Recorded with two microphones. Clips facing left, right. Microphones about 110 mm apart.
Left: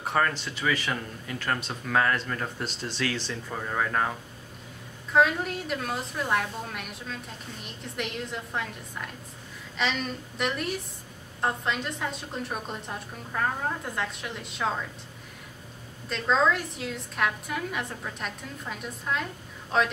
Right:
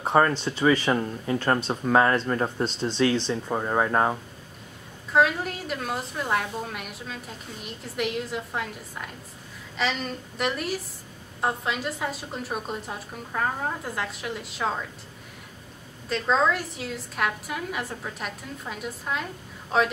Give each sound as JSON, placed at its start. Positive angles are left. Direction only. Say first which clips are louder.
{"t": 0.0, "sound": "speech", "louder": "right 6 dB", "side_deg": -30}
{"t": 5.1, "sound": "a woman's voice", "louder": "right 1 dB", "side_deg": 0}
{"t": 16.1, "sound": "a woman's voice", "louder": "right 1 dB", "side_deg": 0}